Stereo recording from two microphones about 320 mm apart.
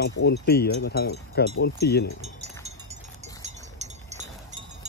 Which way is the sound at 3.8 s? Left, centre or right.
Right.